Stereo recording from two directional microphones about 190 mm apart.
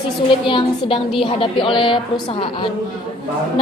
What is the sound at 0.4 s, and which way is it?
A woman's voice, 25° left (ahead or behind).